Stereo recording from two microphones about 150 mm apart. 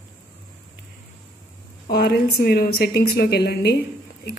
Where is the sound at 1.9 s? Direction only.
90° left.